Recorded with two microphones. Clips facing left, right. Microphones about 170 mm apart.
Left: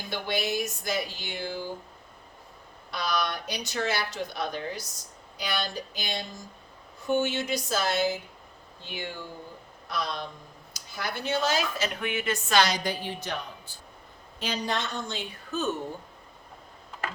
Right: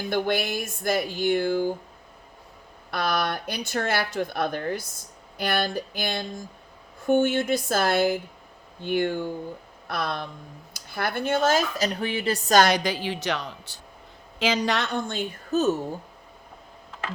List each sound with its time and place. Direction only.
0.1 s speech: 55° right (ahead or behind)
2.9 s speech: 55° right (ahead or behind)
12.7 s speech: 90° right; by 15.7 s 45° right (ahead or behind)